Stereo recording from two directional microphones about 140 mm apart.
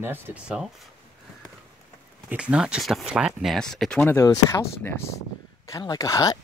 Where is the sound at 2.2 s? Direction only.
10° right (ahead or behind).